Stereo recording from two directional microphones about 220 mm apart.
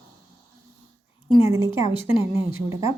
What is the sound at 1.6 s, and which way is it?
Speech, 25° left (ahead or behind).